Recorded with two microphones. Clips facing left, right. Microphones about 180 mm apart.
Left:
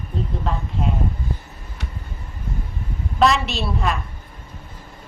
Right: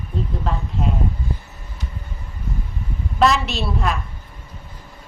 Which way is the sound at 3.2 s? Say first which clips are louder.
Even; centre (ahead or behind).